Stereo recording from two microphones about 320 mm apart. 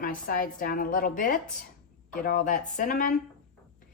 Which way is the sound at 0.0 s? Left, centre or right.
Left.